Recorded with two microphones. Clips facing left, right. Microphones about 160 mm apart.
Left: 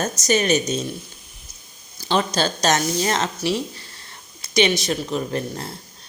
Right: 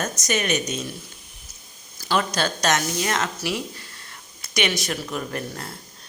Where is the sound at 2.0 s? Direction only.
25° left (ahead or behind).